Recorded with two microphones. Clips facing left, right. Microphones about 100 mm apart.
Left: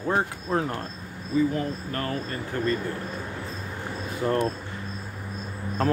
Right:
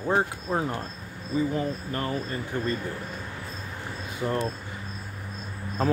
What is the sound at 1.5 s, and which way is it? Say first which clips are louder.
Speech: even; 20° right (ahead or behind).